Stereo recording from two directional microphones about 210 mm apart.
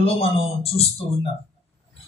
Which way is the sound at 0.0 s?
30° left (ahead or behind).